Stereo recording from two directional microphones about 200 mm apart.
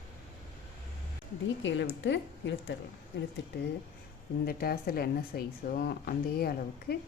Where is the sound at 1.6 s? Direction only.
60° left (ahead or behind).